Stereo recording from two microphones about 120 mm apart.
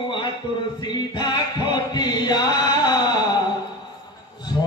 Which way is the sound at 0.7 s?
35° left (ahead or behind).